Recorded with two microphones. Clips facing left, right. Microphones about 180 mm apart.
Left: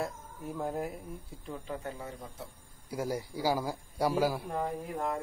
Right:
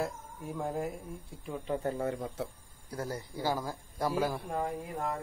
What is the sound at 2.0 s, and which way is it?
Speech, 60° right (ahead or behind).